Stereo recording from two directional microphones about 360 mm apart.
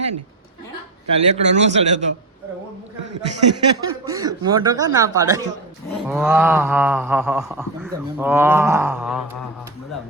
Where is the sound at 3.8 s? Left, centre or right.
Centre.